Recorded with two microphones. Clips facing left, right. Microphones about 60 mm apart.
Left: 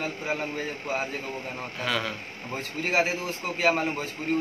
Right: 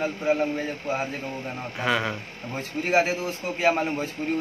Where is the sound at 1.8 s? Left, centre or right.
Right.